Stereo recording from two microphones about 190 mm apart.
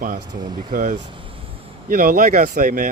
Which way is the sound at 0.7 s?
45° right (ahead or behind).